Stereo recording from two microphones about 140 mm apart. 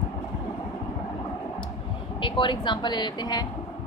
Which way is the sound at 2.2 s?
35° left (ahead or behind).